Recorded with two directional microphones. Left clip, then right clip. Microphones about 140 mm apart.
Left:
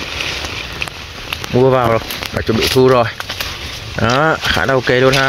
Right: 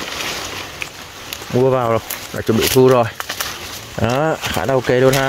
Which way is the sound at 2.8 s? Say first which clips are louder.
Left 1 dB; 25° right (ahead or behind).